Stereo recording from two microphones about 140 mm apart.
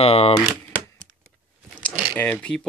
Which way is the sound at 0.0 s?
45° left (ahead or behind).